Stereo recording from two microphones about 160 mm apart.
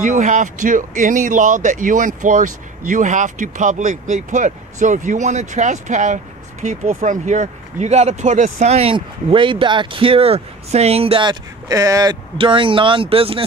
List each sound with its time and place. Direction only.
0.0 s speech: 55° right (ahead or behind); by 13.4 s 35° right (ahead or behind)